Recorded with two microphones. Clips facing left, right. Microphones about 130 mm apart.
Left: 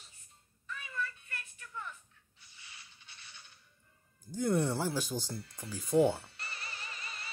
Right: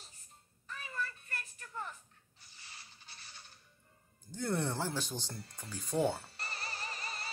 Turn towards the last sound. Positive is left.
turn(degrees=-40)  # may be behind; listen again after turning